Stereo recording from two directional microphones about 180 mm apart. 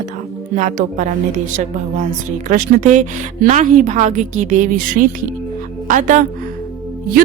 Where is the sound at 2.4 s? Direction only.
45° right (ahead or behind).